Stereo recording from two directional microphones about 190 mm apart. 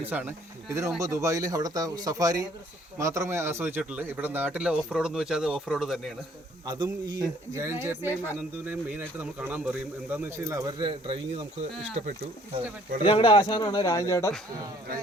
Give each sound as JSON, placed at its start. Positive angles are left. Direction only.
{"t": 0.0, "sound": "speech", "side_deg": -10}
{"t": 6.7, "sound": "a man's voice", "side_deg": -25}
{"t": 13.1, "sound": "speech", "side_deg": 30}